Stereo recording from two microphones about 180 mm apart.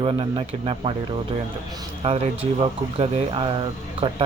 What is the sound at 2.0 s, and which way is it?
A man's voice, 30° right (ahead or behind).